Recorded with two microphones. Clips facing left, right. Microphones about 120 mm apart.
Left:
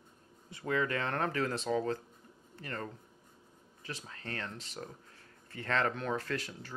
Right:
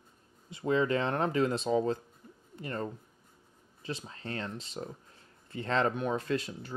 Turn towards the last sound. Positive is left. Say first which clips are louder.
# right 5 dB
turn(degrees=-20)  # may be behind; listen again after turning